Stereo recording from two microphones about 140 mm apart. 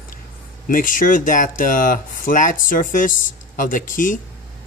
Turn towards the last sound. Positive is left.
turn(degrees=70)  # may be behind; listen again after turning